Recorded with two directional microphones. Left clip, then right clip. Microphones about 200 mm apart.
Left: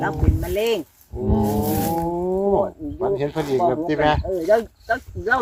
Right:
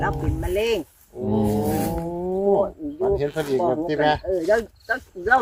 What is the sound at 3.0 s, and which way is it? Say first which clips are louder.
Speech: even; 30° left (ahead or behind).